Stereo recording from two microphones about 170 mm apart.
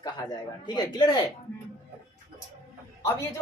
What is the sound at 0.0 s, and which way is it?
Speech, 25° left (ahead or behind).